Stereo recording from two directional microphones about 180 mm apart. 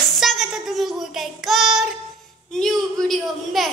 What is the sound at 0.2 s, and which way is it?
A child's voice, centre (ahead or behind).